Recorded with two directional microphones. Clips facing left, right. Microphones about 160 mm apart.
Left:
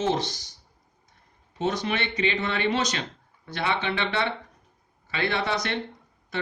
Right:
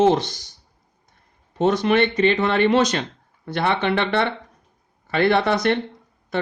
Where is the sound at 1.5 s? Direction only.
55° right (ahead or behind).